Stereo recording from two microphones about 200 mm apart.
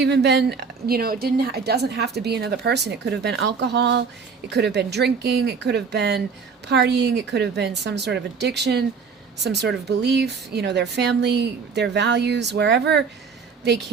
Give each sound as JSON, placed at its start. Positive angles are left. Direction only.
{"t": 0.0, "sound": "a woman's voice", "side_deg": -60}